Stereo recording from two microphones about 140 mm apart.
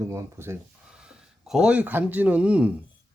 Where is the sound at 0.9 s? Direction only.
5° right (ahead or behind).